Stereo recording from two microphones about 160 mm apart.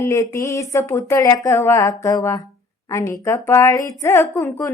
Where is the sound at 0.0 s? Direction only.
20° left (ahead or behind).